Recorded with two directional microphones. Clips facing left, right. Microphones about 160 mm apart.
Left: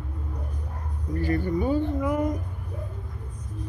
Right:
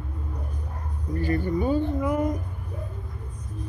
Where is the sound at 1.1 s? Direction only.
25° right (ahead or behind).